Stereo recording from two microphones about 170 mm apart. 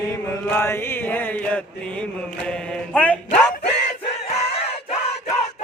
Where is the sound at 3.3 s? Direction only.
40° left (ahead or behind).